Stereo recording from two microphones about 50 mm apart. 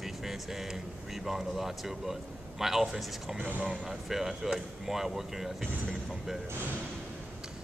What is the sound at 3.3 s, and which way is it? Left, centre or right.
Speech, right.